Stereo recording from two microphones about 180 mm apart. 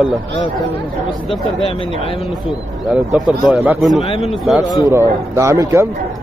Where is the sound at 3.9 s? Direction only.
35° left (ahead or behind).